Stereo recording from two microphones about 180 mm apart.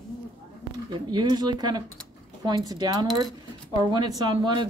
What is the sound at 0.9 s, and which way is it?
A woman's voice, 25° right (ahead or behind).